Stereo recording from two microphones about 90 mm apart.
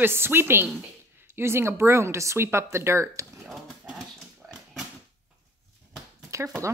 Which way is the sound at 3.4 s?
5° right (ahead or behind).